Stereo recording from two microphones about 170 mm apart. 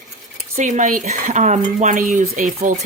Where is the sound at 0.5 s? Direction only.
45° right (ahead or behind).